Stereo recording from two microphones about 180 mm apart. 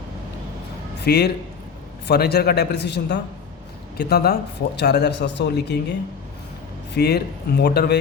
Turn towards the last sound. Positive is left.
turn(degrees=60)  # may be behind; listen again after turning